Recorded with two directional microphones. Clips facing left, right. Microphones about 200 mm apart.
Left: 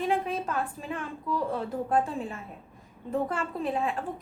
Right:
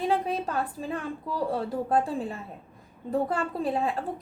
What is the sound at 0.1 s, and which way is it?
A woman's voice, 35° right (ahead or behind).